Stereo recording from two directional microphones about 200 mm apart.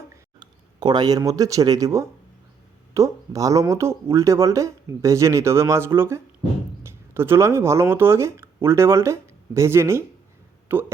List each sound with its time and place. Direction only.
0.3 s speech: 20° right (ahead or behind)